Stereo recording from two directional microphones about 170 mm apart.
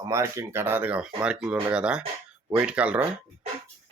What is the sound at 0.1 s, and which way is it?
Speech, 15° right (ahead or behind).